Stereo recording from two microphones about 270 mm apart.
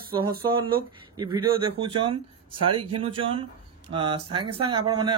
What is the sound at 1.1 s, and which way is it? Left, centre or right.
Speech, centre.